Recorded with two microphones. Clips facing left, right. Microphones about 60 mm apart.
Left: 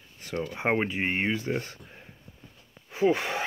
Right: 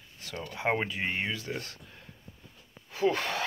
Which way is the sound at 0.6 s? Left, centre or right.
Left.